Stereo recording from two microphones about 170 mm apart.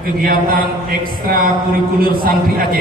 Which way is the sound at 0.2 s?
60° right (ahead or behind).